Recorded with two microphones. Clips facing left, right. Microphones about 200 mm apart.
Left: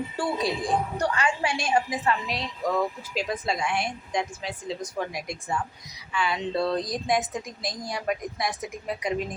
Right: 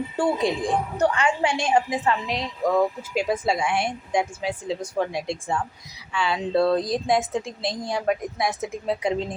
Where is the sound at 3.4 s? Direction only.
Centre (ahead or behind).